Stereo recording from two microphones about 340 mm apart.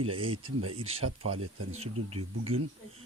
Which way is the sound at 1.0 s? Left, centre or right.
Right.